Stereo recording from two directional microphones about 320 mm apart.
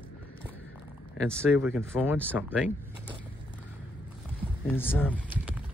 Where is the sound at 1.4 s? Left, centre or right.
Centre.